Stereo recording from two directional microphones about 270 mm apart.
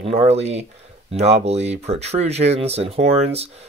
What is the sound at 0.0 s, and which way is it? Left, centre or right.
Speech, right.